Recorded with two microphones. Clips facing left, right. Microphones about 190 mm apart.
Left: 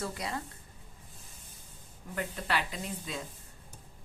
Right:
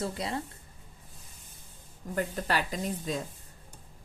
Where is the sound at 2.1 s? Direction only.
40° right (ahead or behind).